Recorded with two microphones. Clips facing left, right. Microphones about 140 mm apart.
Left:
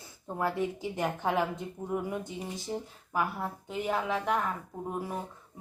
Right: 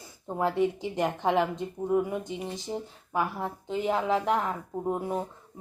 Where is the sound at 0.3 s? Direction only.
20° right (ahead or behind).